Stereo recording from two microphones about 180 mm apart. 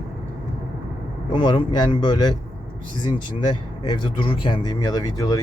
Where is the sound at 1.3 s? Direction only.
25° left (ahead or behind).